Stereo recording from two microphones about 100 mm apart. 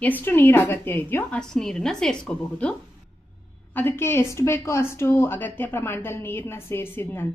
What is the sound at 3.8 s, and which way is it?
Speech, 25° left (ahead or behind).